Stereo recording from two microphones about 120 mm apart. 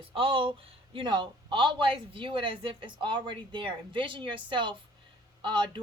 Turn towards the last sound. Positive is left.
turn(degrees=-40)  # may be behind; listen again after turning